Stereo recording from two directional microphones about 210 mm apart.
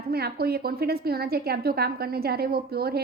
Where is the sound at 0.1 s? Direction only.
50° right (ahead or behind).